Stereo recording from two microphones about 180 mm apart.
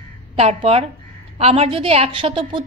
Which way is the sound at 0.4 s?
35° right (ahead or behind).